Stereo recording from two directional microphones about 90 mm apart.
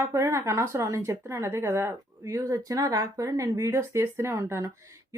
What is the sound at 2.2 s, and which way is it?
Speech, 40° right (ahead or behind).